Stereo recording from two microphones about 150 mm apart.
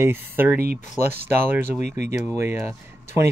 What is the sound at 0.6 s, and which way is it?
Speech, 90° right.